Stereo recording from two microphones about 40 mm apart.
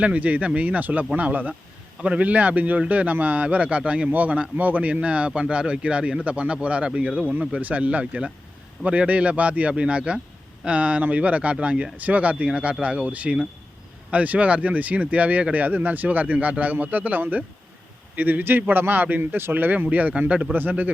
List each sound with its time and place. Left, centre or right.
0.0 s a man's voice: right
2.0 s a man's voice: right
4.1 s a man's voice: right
7.2 s a man's voice: right
12.5 s a man's voice: right
15.5 s a man's voice: right
19.2 s speech: right
19.8 s a man's voice: right
20.5 s a man's voice: right